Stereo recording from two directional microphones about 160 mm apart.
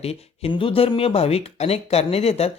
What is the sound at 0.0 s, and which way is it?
Speech, 40° left (ahead or behind).